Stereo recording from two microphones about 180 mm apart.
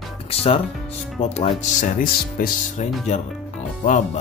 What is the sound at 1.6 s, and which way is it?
Music, 45° left (ahead or behind).